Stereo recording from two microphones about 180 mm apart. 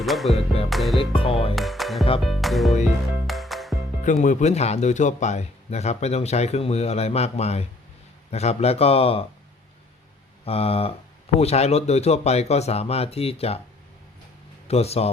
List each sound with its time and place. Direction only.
0.0 s music: centre (ahead or behind)
0.7 s speech: centre (ahead or behind)
0.9 s speech: 30° left (ahead or behind)
1.5 s speech: centre (ahead or behind)
3.2 s music: centre (ahead or behind)
4.0 s speech: 45° left (ahead or behind)
10.4 s speech: 35° left (ahead or behind)
14.7 s speech: 35° left (ahead or behind)